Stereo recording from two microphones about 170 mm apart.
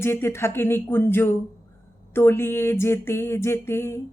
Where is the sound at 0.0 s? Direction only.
15° left (ahead or behind).